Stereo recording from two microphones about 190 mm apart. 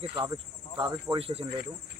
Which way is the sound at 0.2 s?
25° right (ahead or behind).